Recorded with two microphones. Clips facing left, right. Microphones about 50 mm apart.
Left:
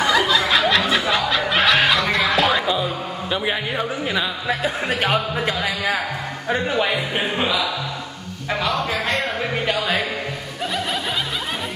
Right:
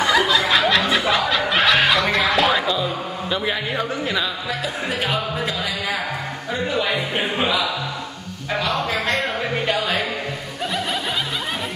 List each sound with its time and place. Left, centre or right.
0.0 s snicker: centre
2.6 s a sound: centre
4.5 s a man's voice: left
6.9 s a man's voice: centre